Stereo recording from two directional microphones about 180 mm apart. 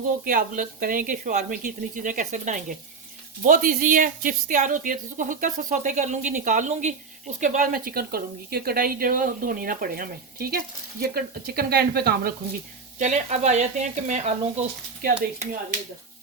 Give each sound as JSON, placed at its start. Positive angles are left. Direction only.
{"t": 0.0, "sound": "a woman's voice", "side_deg": -45}
{"t": 13.0, "sound": "speech", "side_deg": -40}